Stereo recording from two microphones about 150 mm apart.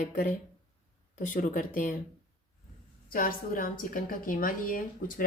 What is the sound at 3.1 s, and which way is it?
Speech, 65° left (ahead or behind).